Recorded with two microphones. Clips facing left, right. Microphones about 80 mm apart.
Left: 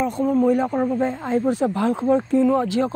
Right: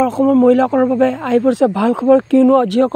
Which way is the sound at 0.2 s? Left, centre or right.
Right.